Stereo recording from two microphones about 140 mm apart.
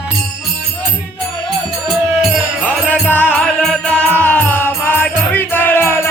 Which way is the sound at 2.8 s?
5° left (ahead or behind).